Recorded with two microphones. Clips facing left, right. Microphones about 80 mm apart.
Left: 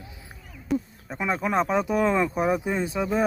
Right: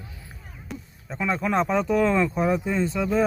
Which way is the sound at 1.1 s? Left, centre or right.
Centre.